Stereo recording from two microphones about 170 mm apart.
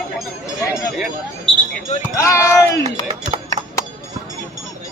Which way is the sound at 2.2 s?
15° left (ahead or behind).